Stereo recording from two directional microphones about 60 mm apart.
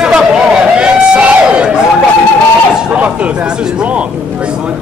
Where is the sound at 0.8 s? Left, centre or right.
Right.